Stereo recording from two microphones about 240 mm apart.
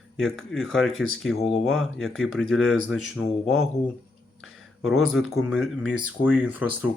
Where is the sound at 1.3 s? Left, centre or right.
Left.